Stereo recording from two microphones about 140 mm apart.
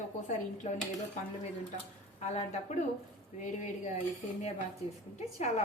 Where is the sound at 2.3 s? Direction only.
55° left (ahead or behind).